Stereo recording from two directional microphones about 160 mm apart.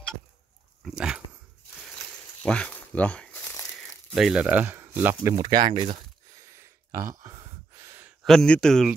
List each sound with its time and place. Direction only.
0.8 s dog: 5° right (ahead or behind)
2.4 s crumpling: 5° left (ahead or behind)
4.1 s speech: 5° right (ahead or behind)
5.3 s speech: 30° right (ahead or behind)
6.3 s a sound: 20° right (ahead or behind)
7.2 s gasp: 20° right (ahead or behind)
8.2 s speech: centre (ahead or behind)